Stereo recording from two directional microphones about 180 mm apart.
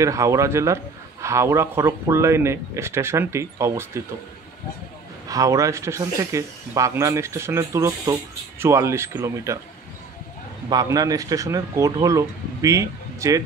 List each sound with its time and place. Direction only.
0.0 s speech: 15° right (ahead or behind)
5.3 s speech: 20° right (ahead or behind)
10.7 s speech: 20° right (ahead or behind)